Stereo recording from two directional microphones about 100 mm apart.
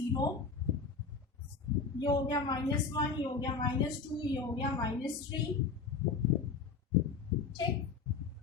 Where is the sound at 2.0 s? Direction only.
45° left (ahead or behind).